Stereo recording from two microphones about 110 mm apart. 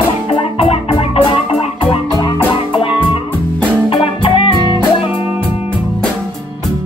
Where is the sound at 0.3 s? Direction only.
60° left (ahead or behind).